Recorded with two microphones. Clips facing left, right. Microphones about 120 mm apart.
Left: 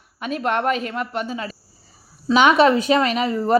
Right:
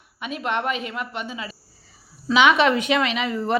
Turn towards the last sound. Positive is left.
turn(degrees=40)  # may be behind; listen again after turning